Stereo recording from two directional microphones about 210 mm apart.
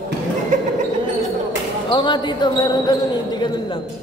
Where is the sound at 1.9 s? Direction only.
20° left (ahead or behind).